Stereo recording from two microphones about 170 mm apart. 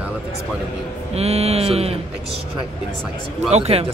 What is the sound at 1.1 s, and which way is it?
Speech, 40° right (ahead or behind).